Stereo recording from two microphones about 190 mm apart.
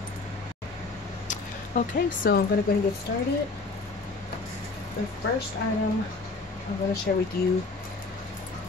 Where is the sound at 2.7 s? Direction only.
50° left (ahead or behind).